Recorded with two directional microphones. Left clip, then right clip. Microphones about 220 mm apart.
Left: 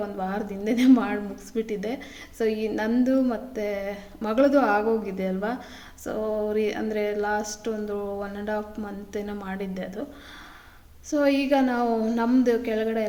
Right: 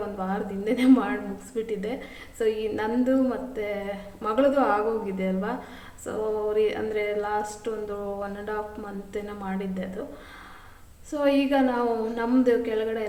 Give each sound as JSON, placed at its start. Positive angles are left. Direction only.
{"t": 0.2, "sound": "a woman's voice", "side_deg": 50}
{"t": 11.1, "sound": "a woman's voice", "side_deg": 45}